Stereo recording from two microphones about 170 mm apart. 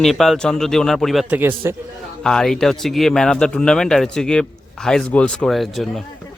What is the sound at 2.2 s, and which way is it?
Speech, 5° left (ahead or behind).